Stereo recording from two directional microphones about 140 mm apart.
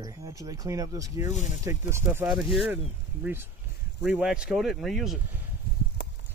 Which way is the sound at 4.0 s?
5° right (ahead or behind).